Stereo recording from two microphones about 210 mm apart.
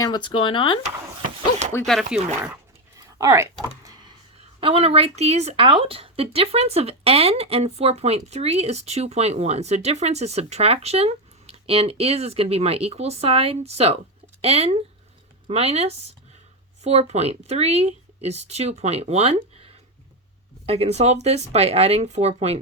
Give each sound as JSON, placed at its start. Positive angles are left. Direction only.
{"t": 0.0, "sound": "speech", "side_deg": 20}
{"t": 1.2, "sound": "a sound", "side_deg": -35}
{"t": 3.2, "sound": "speech", "side_deg": -15}
{"t": 4.6, "sound": "speech", "side_deg": -25}